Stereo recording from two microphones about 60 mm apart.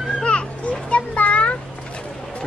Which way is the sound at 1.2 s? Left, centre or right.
Left.